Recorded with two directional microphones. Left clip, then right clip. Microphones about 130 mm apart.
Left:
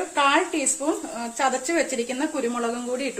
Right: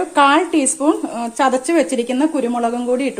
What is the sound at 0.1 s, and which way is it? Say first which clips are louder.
Speech: right 8 dB; 90° right.